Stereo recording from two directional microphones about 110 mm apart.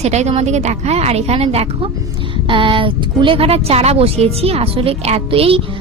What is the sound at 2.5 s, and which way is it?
Speech, 50° right (ahead or behind).